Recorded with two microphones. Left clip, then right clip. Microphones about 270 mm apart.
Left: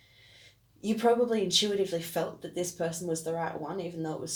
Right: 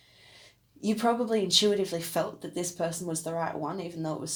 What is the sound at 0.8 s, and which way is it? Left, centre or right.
Speech, right.